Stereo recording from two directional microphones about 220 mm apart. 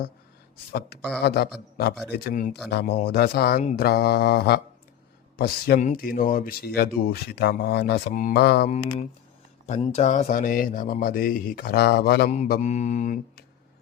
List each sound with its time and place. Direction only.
0.7 s speech: 45° left (ahead or behind)
8.6 s speech: 30° left (ahead or behind); by 12.3 s 45° left (ahead or behind)
12.3 s speech: 35° left (ahead or behind)